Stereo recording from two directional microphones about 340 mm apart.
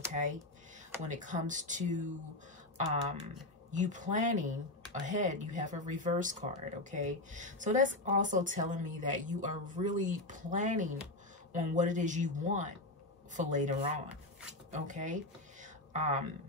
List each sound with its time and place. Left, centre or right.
0.1 s speech: right
3.7 s speech: right